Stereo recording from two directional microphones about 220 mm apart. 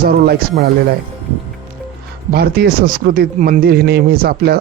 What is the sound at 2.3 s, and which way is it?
A man's voice, 45° right (ahead or behind).